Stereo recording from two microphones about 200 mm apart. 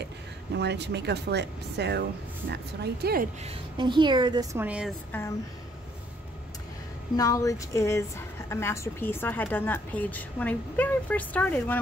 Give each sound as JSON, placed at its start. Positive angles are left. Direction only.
{"t": 0.6, "sound": "speech", "side_deg": -60}
{"t": 3.4, "sound": "a woman's voice", "side_deg": -25}
{"t": 7.2, "sound": "a woman's voice", "side_deg": 15}